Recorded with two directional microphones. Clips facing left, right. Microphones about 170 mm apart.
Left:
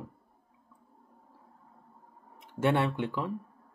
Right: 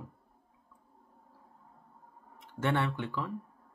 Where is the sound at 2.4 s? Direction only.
15° left (ahead or behind).